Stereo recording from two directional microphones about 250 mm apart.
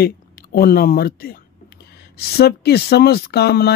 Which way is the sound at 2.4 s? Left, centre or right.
Left.